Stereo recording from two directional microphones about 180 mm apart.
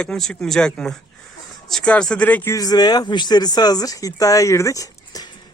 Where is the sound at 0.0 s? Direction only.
5° left (ahead or behind).